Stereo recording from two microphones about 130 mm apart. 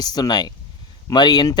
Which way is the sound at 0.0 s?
30° left (ahead or behind).